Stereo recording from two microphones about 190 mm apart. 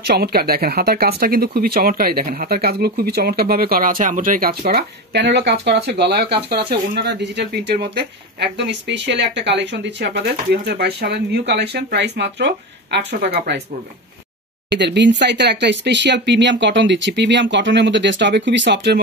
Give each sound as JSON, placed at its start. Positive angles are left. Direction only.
{"t": 0.0, "sound": "speech", "side_deg": -55}
{"t": 14.7, "sound": "speech", "side_deg": -65}